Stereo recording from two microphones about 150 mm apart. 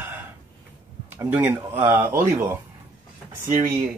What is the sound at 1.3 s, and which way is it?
Speech, 15° right (ahead or behind).